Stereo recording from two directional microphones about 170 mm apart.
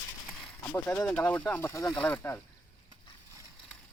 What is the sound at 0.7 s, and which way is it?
Speech, 10° left (ahead or behind).